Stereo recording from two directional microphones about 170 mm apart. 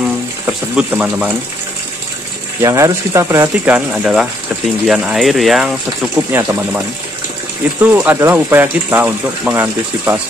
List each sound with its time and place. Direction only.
0.5 s speech: 10° right (ahead or behind)
2.6 s speech: 20° right (ahead or behind); by 5.7 s centre (ahead or behind)
6.3 s speech: 15° right (ahead or behind)
7.8 s speech: 10° right (ahead or behind)